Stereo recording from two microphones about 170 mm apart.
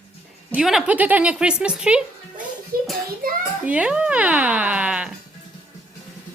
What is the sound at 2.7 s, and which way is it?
Speech, 60° right (ahead or behind).